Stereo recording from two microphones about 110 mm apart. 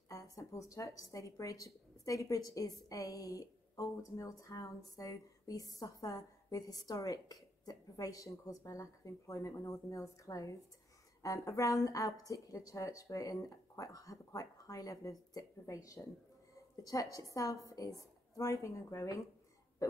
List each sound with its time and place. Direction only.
0.4 s a woman's voice: 30° left (ahead or behind)